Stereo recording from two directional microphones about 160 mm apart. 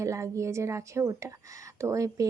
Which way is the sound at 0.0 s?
20° right (ahead or behind).